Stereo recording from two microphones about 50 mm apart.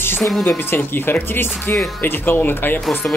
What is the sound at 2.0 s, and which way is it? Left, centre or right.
Speech, left.